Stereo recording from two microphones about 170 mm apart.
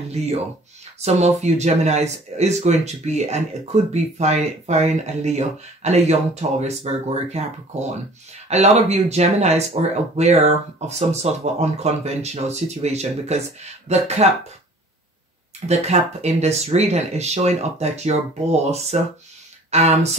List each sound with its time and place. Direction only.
1.0 s speech: 40° right (ahead or behind)
15.7 s speech: 40° right (ahead or behind)